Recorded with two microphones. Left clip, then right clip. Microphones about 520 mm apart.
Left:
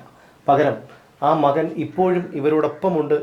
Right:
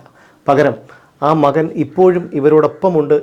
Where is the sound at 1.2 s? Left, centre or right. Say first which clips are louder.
Right 4 dB; right.